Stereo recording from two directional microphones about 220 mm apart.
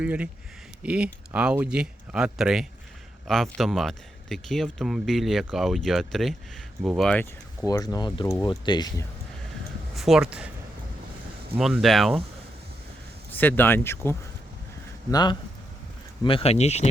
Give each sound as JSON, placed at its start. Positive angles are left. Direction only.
{"t": 0.0, "sound": "speech", "side_deg": -5}
{"t": 9.9, "sound": "speech", "side_deg": 0}
{"t": 11.6, "sound": "speech", "side_deg": 0}
{"t": 13.3, "sound": "speech", "side_deg": 10}